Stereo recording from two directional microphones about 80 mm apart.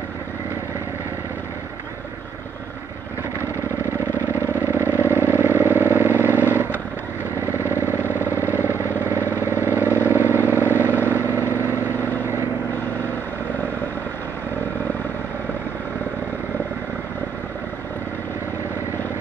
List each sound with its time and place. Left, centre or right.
4.3 s vehicle: right
7.5 s vehicle: right
10.7 s vehicle: left
11.1 s vehicle: right